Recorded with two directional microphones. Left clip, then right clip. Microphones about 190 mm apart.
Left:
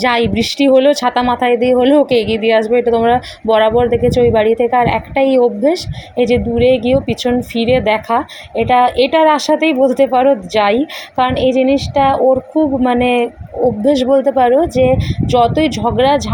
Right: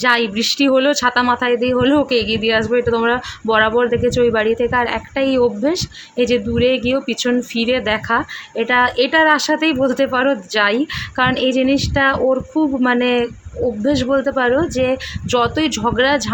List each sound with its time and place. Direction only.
0.0 s a woman's voice: 5° left (ahead or behind)